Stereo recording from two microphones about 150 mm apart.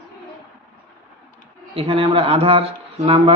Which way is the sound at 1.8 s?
40° right (ahead or behind).